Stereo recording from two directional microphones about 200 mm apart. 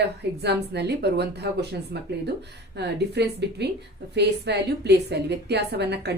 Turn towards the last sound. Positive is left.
turn(degrees=-55)  # may be behind; listen again after turning